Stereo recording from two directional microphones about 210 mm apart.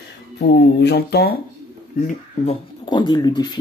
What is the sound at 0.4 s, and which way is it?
Speech, 50° left (ahead or behind).